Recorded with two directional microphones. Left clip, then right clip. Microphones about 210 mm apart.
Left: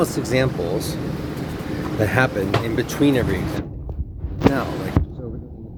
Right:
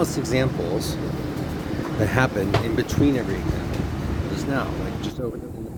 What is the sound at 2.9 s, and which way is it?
Speech, 15° left (ahead or behind).